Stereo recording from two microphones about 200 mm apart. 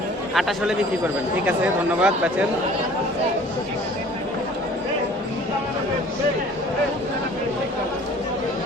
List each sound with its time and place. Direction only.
0.3 s a man's voice: centre (ahead or behind)